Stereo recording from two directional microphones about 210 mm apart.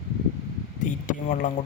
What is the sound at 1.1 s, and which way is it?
Speech, 40° left (ahead or behind).